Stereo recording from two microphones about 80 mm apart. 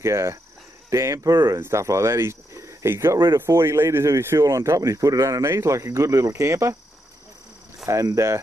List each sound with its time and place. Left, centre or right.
0.0 s speech: right
1.3 s speech: right
1.6 s speech: right
7.8 s speech: right